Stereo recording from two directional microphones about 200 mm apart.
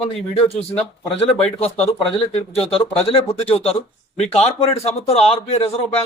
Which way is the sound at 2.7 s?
30° left (ahead or behind).